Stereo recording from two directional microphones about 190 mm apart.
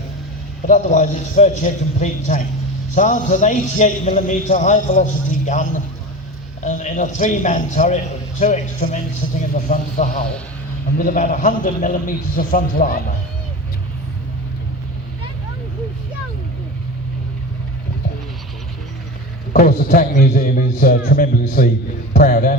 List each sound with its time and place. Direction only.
0.7 s a man's voice: 40° left (ahead or behind)
6.7 s a man's voice: 40° left (ahead or behind)
19.5 s a man's voice: 45° left (ahead or behind)